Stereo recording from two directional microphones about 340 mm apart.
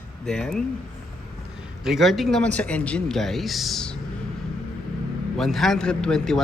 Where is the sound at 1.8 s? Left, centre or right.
Centre.